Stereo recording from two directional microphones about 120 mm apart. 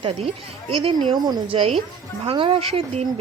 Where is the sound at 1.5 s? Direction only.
50° right (ahead or behind).